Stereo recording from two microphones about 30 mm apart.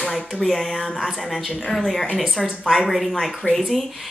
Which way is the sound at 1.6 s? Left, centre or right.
Centre.